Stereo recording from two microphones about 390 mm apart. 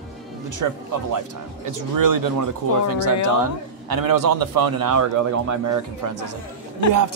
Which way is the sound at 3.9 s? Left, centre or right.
Right.